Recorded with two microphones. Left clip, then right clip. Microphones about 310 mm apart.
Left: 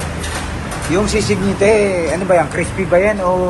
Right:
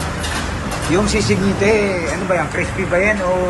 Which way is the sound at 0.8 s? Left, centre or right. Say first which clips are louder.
Left 1 dB; centre.